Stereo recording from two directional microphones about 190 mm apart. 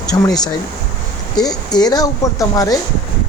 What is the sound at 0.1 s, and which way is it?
Speech, 20° left (ahead or behind).